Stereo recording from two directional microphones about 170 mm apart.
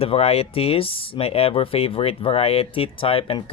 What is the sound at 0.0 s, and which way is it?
Speech, 35° left (ahead or behind).